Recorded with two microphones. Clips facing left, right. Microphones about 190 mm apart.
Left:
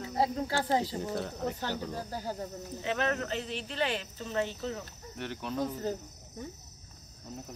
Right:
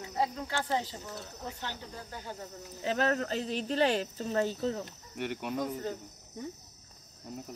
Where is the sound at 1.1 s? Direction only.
60° left (ahead or behind).